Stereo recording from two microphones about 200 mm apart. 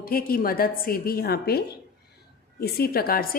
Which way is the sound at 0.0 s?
45° left (ahead or behind).